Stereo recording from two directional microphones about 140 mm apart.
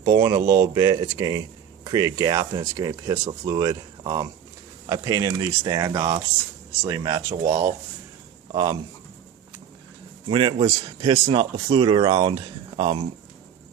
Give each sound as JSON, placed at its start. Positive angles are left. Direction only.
{"t": 0.0, "sound": "speech", "side_deg": -25}
{"t": 10.2, "sound": "a man's voice", "side_deg": -35}